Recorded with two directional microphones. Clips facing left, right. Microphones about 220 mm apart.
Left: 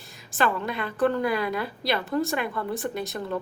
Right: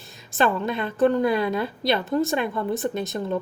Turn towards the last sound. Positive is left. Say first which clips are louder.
# right 4 dB
turn(degrees=-20)  # may be behind; listen again after turning